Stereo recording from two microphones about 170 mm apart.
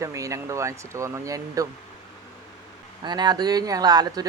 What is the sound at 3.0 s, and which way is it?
Speech, 25° right (ahead or behind).